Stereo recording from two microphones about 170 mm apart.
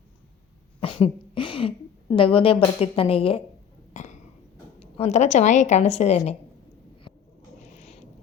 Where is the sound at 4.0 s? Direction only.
45° left (ahead or behind).